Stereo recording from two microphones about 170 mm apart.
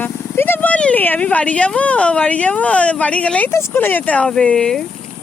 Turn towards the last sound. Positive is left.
turn(degrees=5)  # may be behind; listen again after turning